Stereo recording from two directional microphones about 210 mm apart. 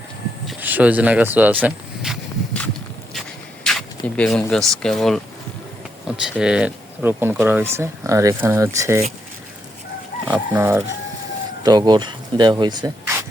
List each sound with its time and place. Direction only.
0.4 s a sound: 5° right (ahead or behind)
6.1 s speech: 5° right (ahead or behind)
10.2 s speech: 10° right (ahead or behind)
11.6 s speech: 20° right (ahead or behind)